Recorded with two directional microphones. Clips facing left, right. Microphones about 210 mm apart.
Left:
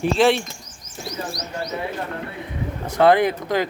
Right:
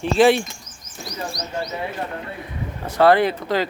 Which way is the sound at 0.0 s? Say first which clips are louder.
Right 2 dB; centre (ahead or behind).